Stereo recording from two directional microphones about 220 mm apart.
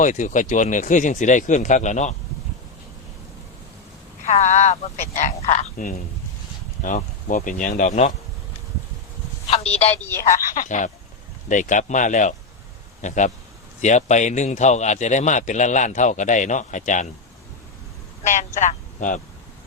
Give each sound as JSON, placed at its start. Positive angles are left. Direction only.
{"t": 0.0, "sound": "speech", "side_deg": 35}
{"t": 4.3, "sound": "speech", "side_deg": 30}
{"t": 9.5, "sound": "telephone", "side_deg": 30}
{"t": 10.0, "sound": "speech", "side_deg": 10}
{"t": 10.2, "sound": "speech", "side_deg": 35}
{"t": 18.2, "sound": "a man's voice", "side_deg": 35}